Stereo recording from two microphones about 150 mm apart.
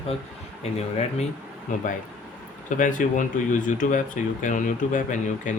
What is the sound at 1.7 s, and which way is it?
Speech, 55° left (ahead or behind).